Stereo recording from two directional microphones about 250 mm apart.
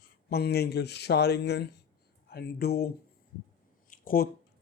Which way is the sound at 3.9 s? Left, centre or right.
Left.